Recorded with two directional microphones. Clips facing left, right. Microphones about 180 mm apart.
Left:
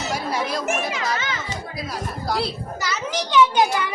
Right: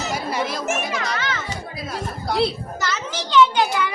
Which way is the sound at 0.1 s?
Centre (ahead or behind).